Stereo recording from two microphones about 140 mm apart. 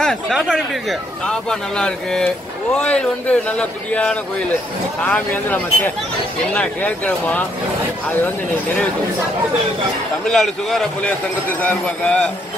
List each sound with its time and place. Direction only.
0.0 s a man's voice: centre (ahead or behind)
10.2 s a man's voice: 5° left (ahead or behind)